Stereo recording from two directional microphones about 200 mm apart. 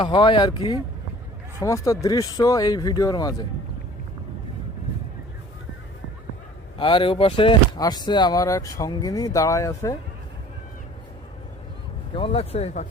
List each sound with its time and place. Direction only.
0.0 s speech: 25° left (ahead or behind)
6.7 s speech: 25° left (ahead or behind)
12.1 s speech: 30° left (ahead or behind)